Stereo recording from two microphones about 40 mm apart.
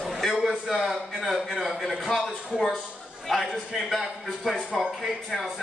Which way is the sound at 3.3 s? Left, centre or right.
Centre.